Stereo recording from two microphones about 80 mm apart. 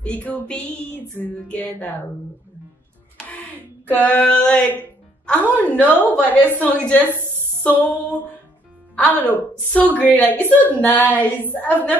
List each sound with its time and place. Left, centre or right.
0.0 s music: centre
3.9 s music: left